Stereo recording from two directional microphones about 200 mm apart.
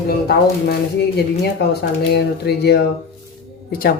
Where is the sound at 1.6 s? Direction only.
55° left (ahead or behind).